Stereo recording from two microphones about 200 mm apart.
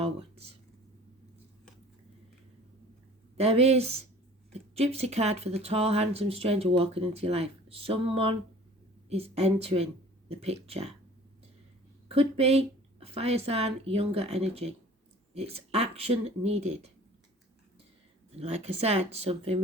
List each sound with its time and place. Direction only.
0.0 s speech: 30° right (ahead or behind)
3.3 s speech: 30° right (ahead or behind)
12.0 s speech: 30° right (ahead or behind)
18.3 s speech: 30° right (ahead or behind)